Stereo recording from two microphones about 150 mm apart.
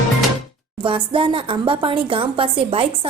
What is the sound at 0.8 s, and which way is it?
A woman's voice, 35° right (ahead or behind).